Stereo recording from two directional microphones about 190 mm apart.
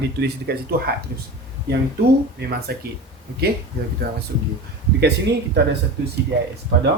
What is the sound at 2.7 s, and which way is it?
Speech, 55° right (ahead or behind).